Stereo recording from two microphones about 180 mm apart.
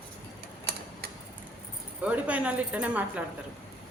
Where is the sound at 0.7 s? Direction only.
60° right (ahead or behind).